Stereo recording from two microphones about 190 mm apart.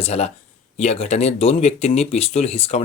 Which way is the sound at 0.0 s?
35° left (ahead or behind).